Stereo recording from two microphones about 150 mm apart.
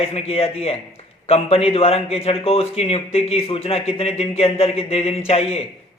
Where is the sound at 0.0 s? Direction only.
40° left (ahead or behind).